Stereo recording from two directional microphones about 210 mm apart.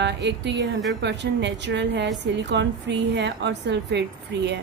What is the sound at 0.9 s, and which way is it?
A woman's voice, 55° right (ahead or behind).